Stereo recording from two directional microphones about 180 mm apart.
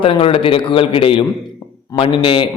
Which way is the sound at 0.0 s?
30° left (ahead or behind).